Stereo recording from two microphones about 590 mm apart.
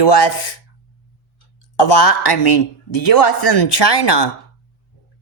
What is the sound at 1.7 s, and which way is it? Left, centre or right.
A man's voice, left.